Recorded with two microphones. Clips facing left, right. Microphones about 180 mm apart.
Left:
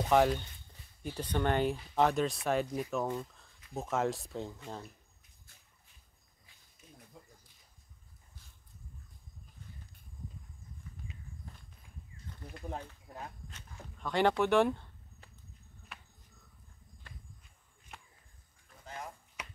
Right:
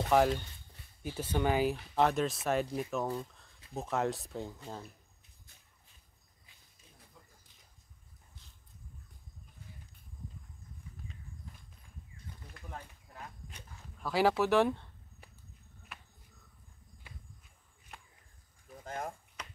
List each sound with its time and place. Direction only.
0.1 s speech: centre (ahead or behind)
13.5 s zipper: 10° right (ahead or behind)
15.9 s a sound: centre (ahead or behind)
17.0 s walk: 10° right (ahead or behind)
17.9 s a sound: centre (ahead or behind)
18.9 s chop: 50° right (ahead or behind)